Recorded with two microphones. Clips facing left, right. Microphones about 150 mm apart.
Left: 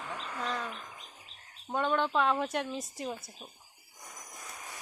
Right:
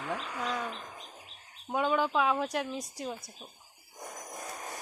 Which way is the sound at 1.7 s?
5° right (ahead or behind).